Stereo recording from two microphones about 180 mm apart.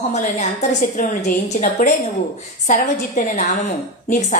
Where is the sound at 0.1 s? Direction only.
40° left (ahead or behind).